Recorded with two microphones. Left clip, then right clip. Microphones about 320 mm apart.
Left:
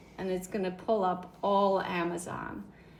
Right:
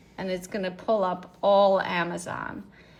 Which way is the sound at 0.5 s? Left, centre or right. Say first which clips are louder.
Right 5 dB; right.